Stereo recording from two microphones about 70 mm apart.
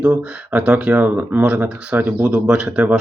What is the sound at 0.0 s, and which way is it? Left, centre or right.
Speech, centre.